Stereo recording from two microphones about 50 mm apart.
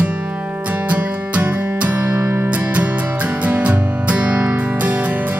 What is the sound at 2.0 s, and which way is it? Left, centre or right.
Music, right.